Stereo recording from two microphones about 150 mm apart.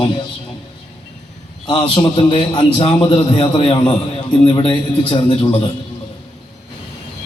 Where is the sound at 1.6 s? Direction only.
35° left (ahead or behind).